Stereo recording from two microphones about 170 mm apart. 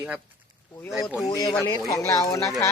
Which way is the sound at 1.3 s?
20° left (ahead or behind).